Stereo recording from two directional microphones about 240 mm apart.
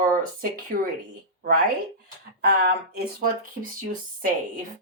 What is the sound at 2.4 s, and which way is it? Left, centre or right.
Speech, right.